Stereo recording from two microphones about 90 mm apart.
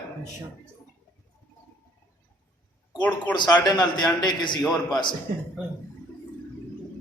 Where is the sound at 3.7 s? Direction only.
50° left (ahead or behind).